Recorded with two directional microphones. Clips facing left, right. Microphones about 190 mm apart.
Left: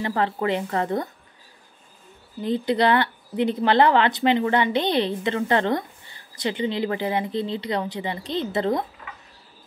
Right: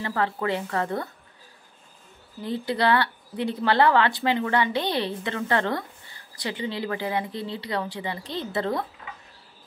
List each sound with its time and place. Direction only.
0.0 s speech: 25° left (ahead or behind)
2.4 s speech: 20° left (ahead or behind)